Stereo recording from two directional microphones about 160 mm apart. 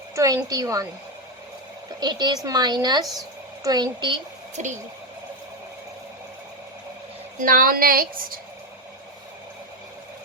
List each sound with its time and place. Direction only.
0.2 s a woman's voice: 20° right (ahead or behind)
2.0 s a woman's voice: 25° right (ahead or behind)
4.5 s speech: 50° right (ahead or behind)
7.4 s a woman's voice: 60° right (ahead or behind)